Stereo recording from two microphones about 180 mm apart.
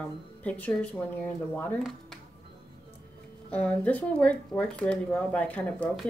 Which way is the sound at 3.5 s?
5° left (ahead or behind).